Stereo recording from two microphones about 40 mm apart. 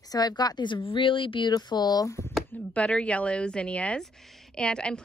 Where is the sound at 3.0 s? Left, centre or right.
Left.